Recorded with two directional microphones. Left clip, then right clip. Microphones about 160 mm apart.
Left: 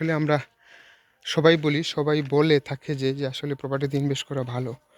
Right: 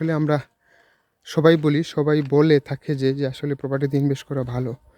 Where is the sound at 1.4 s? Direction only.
40° right (ahead or behind).